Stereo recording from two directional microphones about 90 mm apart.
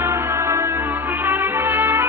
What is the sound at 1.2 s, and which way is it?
Trumpet, 25° right (ahead or behind).